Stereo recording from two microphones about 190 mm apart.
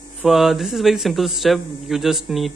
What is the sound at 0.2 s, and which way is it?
Speech, centre (ahead or behind).